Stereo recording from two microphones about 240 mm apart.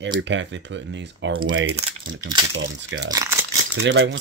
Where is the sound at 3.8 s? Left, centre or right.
Right.